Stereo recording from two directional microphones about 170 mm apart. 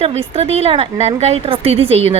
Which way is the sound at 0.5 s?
35° right (ahead or behind).